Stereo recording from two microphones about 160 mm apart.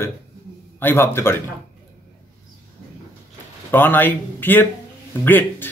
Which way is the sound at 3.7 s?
15° left (ahead or behind).